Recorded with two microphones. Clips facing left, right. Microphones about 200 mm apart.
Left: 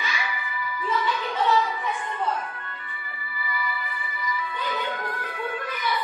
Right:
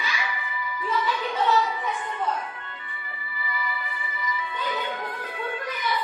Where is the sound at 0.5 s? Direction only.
20° right (ahead or behind).